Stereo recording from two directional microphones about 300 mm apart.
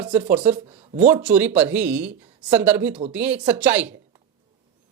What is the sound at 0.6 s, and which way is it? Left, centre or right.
Speech, centre.